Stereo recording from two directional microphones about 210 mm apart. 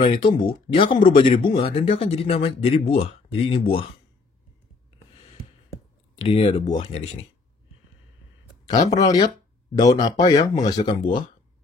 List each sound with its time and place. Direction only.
0.0 s speech: 25° left (ahead or behind)
6.2 s speech: 25° left (ahead or behind)
8.6 s speech: 20° left (ahead or behind)